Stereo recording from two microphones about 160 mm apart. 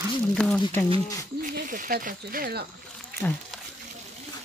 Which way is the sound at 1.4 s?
60° right (ahead or behind).